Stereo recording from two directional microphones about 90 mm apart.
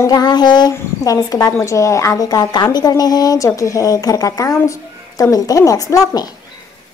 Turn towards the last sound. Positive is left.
turn(degrees=45)  # may be behind; listen again after turning